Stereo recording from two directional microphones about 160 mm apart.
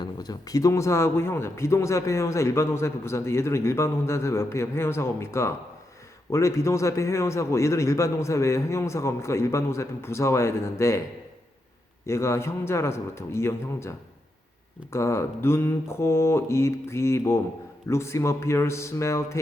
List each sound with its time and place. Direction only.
0.0 s speech: 25° left (ahead or behind)
12.0 s speech: 15° left (ahead or behind)